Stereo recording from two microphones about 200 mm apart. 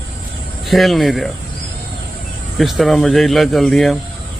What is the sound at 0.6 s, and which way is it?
Speech, centre (ahead or behind).